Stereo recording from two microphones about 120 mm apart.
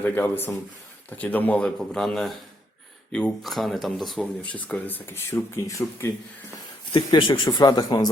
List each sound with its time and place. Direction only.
0.0 s speech: 15° left (ahead or behind); by 4.3 s centre (ahead or behind)
4.5 s speech: 15° left (ahead or behind)
6.9 s speech: 45° left (ahead or behind)